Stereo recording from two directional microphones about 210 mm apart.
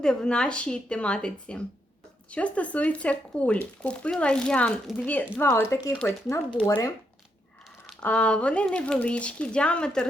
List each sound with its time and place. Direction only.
0.0 s speech: 5° left (ahead or behind)